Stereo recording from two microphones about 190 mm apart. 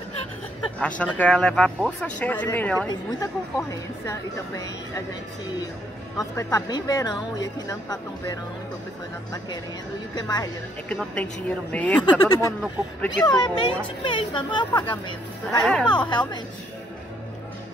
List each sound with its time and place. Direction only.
0.7 s a woman's voice: 5° left (ahead or behind)
2.9 s a woman's voice: 20° left (ahead or behind)
6.1 s a woman's voice: 15° left (ahead or behind)
10.1 s a woman's voice: 20° left (ahead or behind)
10.9 s a woman's voice: 5° left (ahead or behind)
12.0 s a woman's voice: 20° left (ahead or behind)
15.6 s speech: 5° left (ahead or behind)
16.1 s a woman's voice: 25° left (ahead or behind)